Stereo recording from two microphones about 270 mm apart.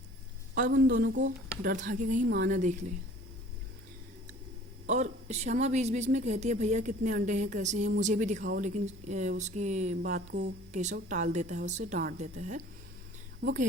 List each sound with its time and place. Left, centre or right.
0.7 s speech: right
4.9 s a woman's voice: right